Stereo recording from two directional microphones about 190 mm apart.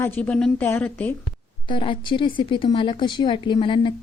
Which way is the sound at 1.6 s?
25° left (ahead or behind).